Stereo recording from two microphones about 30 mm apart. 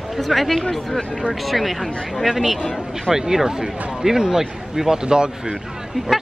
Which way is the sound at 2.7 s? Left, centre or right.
Centre.